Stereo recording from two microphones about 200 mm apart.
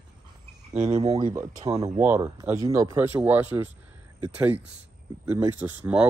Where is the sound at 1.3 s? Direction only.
10° right (ahead or behind).